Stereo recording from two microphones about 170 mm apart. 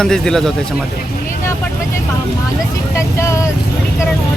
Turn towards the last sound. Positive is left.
turn(degrees=15)  # may be behind; listen again after turning